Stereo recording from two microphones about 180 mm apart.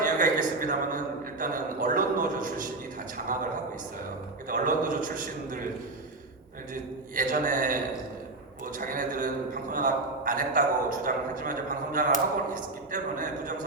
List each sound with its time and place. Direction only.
0.0 s a sound: 50° right (ahead or behind)
3.3 s a man's voice: 50° right (ahead or behind)
7.2 s a man's voice: 50° right (ahead or behind)